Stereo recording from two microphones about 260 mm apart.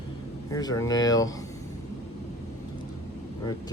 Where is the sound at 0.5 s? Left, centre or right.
Centre.